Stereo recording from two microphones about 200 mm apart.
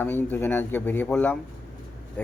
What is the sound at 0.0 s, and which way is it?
Speech, 10° left (ahead or behind).